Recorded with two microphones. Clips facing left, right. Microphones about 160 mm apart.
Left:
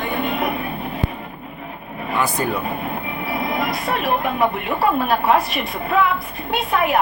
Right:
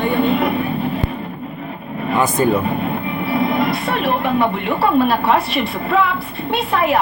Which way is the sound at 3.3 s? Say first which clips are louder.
Right 5 dB; 25° right (ahead or behind).